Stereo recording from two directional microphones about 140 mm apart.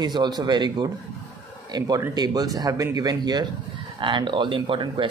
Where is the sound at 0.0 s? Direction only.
30° right (ahead or behind).